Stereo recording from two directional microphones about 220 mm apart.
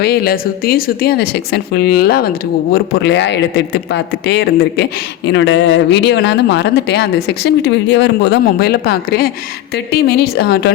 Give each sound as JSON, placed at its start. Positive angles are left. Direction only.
{"t": 0.0, "sound": "speech", "side_deg": 45}